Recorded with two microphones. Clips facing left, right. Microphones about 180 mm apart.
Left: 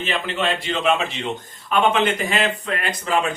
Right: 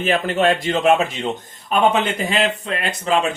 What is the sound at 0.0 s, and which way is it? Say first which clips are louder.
Speech: right 6 dB; 45° right (ahead or behind).